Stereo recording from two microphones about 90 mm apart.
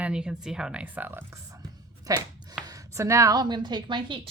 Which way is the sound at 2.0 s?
45° right (ahead or behind).